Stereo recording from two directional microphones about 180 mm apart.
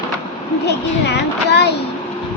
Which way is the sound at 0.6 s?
70° left (ahead or behind).